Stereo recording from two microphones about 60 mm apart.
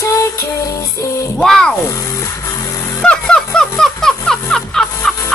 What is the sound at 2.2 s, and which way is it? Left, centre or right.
Music, left.